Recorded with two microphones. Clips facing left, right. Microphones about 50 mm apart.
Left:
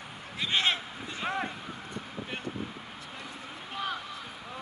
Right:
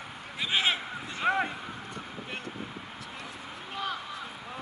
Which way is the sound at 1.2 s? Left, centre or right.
Centre.